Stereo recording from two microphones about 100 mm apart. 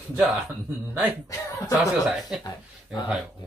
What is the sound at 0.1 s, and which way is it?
Speech, centre (ahead or behind).